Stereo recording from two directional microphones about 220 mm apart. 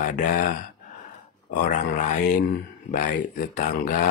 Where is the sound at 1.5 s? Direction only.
35° left (ahead or behind).